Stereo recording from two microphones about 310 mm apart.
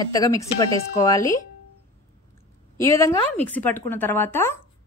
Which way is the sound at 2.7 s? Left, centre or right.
Centre.